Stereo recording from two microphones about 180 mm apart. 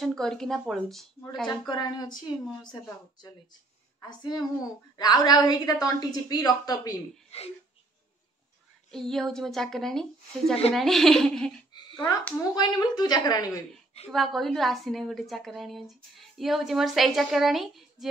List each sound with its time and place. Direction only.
0.0 s a woman's voice: centre (ahead or behind)
1.7 s a woman's voice: 25° left (ahead or behind)
7.2 s speech: 35° left (ahead or behind)
8.9 s a woman's voice: centre (ahead or behind)
11.7 s a sound: 25° left (ahead or behind)
12.3 s a woman's voice: 15° left (ahead or behind)
14.1 s a woman's voice: centre (ahead or behind)